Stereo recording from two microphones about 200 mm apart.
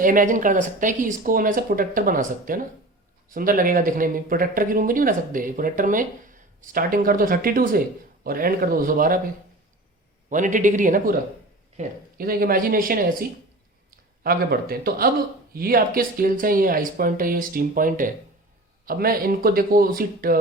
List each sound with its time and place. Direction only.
0.0 s speech: 45° right (ahead or behind)
10.2 s a man's voice: 40° right (ahead or behind)
14.3 s speech: 50° right (ahead or behind)